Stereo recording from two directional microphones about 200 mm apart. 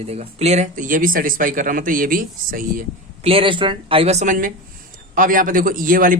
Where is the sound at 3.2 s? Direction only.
25° right (ahead or behind).